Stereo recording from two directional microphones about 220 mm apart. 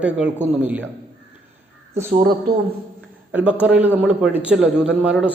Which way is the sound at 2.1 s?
40° right (ahead or behind).